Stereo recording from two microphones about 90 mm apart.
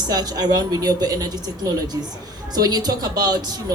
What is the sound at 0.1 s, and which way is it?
A woman's voice, 45° right (ahead or behind).